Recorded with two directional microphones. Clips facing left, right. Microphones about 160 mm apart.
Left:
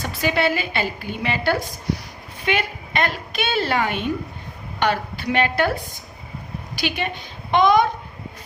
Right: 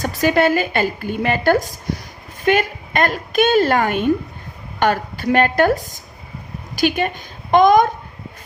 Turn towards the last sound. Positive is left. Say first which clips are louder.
# right 4 dB
turn(degrees=-45)  # may be behind; listen again after turning